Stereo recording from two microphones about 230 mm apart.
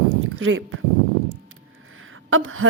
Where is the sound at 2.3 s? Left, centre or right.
Right.